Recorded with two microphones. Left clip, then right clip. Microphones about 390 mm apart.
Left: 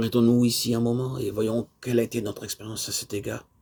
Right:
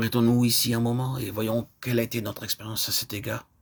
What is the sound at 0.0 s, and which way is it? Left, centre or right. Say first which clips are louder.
Speech: left 2 dB; centre.